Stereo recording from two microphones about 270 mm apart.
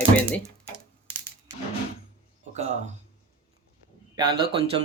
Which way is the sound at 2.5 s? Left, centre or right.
Right.